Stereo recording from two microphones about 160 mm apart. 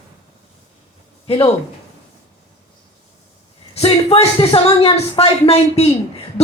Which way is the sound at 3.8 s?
35° left (ahead or behind).